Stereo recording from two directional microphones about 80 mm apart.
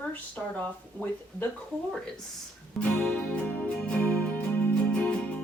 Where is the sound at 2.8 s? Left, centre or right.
Centre.